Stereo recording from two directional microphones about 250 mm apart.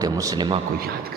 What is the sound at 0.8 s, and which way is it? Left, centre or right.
Speech, right.